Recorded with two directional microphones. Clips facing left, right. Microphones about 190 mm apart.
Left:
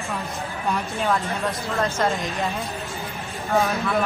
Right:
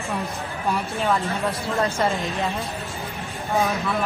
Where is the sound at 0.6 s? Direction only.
Centre (ahead or behind).